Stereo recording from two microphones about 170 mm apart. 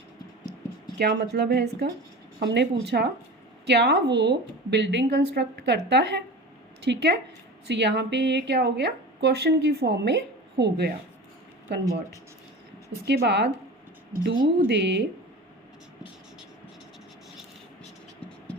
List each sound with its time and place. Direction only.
0.9 s a woman's voice: 75° right (ahead or behind); by 6.2 s 90° right
6.8 s a woman's voice: 75° right (ahead or behind)
11.7 s a woman's voice: 90° right
13.1 s a woman's voice: 85° right
14.1 s speech: 55° right (ahead or behind)
14.7 s a woman's voice: 90° right